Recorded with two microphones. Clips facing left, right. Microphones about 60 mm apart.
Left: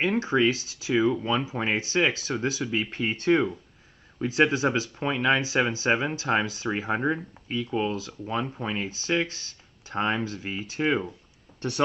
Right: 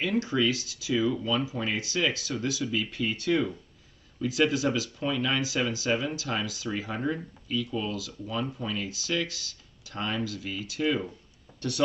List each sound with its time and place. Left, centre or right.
0.0 s speech: left